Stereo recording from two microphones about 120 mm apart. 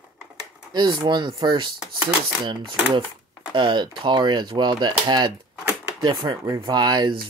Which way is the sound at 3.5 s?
40° right (ahead or behind).